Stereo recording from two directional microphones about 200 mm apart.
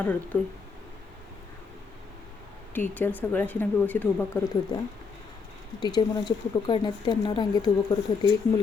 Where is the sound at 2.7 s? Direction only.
10° left (ahead or behind).